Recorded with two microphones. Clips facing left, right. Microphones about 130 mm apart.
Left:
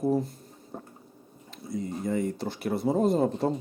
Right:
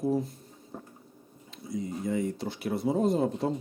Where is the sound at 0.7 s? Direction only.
30° left (ahead or behind).